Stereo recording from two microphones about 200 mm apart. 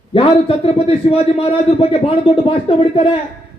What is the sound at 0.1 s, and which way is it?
A man's voice, 25° left (ahead or behind).